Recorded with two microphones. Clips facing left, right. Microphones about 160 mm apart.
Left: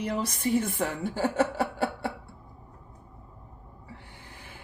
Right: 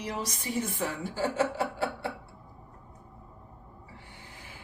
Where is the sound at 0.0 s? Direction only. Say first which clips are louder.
Left 6 dB; 55° left (ahead or behind).